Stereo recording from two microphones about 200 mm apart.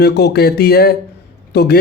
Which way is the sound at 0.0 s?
55° left (ahead or behind).